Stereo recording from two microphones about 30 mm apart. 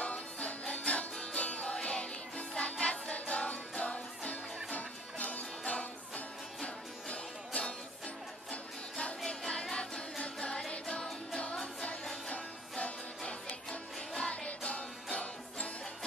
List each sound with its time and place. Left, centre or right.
0.0 s music: left
9.8 s music: left
12.3 s music: left
13.7 s music: left
14.3 s music: left